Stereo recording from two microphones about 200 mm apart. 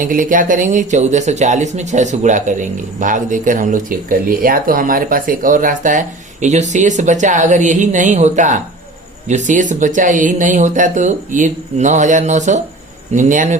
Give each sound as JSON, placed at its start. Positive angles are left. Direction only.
{"t": 0.0, "sound": "speech", "side_deg": -45}